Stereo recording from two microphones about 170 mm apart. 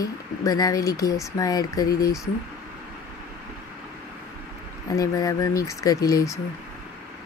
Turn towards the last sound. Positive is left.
turn(degrees=20)  # may be behind; listen again after turning